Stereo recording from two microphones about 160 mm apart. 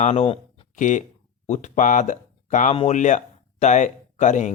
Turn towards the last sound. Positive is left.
turn(degrees=50)  # may be behind; listen again after turning